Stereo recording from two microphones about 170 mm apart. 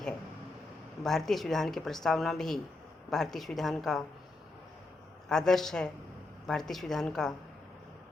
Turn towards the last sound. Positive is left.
turn(degrees=5)  # may be behind; listen again after turning